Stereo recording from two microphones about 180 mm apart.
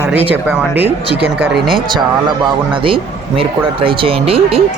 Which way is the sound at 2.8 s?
30° right (ahead or behind).